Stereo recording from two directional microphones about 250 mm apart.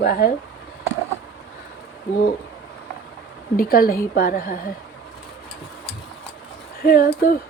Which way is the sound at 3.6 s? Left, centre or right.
Left.